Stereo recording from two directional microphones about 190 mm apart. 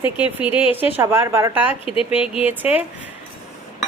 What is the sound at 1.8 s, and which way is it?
Speech, 30° left (ahead or behind).